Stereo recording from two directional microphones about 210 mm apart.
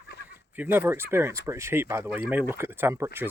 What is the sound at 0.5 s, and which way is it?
Speech, 10° right (ahead or behind).